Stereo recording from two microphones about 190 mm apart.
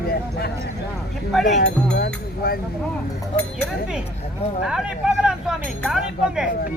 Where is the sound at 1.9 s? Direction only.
60° left (ahead or behind).